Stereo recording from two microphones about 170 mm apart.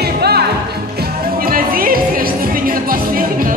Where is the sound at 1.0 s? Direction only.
60° right (ahead or behind).